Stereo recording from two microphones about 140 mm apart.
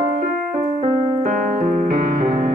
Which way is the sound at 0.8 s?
80° right.